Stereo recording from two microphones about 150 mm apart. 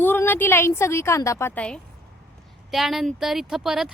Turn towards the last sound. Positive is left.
turn(degrees=-5)  # may be behind; listen again after turning